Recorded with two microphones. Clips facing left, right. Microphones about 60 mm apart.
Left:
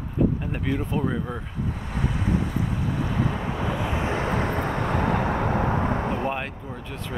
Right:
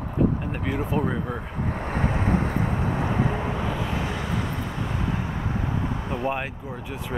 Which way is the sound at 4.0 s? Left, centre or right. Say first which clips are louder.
Left 3 dB; left.